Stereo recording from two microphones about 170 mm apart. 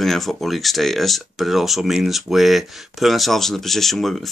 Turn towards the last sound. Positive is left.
turn(degrees=0)  # may be behind; listen again after turning